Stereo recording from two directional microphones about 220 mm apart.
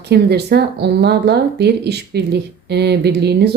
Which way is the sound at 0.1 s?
45° right (ahead or behind).